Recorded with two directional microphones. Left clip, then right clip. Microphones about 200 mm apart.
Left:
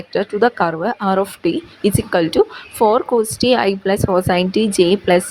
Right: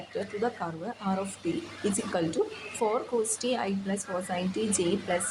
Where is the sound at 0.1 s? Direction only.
40° left (ahead or behind).